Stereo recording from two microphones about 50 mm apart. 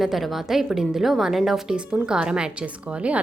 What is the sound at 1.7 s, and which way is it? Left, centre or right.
A woman's voice, centre.